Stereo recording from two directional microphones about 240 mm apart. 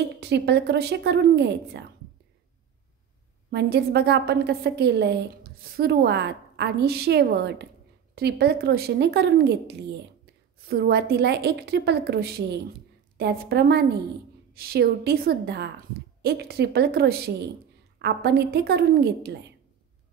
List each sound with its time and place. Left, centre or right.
0.2 s a woman's voice: right
3.4 s a woman's voice: right